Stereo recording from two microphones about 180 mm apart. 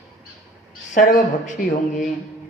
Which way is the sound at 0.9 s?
45° left (ahead or behind).